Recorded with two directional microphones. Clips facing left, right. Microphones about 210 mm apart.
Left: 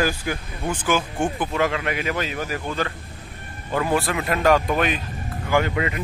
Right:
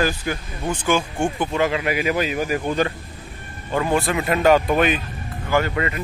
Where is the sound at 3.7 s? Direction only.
5° left (ahead or behind).